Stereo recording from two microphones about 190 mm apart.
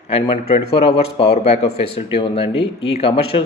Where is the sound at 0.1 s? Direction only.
30° left (ahead or behind).